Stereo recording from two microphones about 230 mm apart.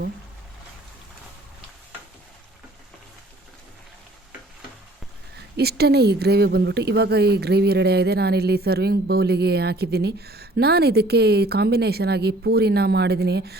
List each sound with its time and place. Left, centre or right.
5.5 s a woman's voice: right